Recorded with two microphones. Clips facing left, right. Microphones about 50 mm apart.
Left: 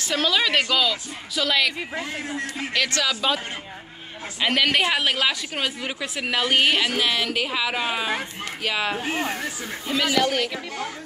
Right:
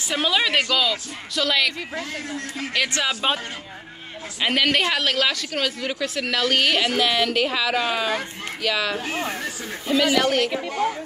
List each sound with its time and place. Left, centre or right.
0.1 s speech: centre
2.0 s speech: centre
2.9 s speech: right
4.4 s speech: centre
6.8 s speech: centre; by 9.1 s left
9.1 s speech: centre